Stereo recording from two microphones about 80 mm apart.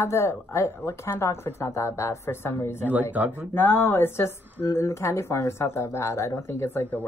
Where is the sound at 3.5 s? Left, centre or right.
Left.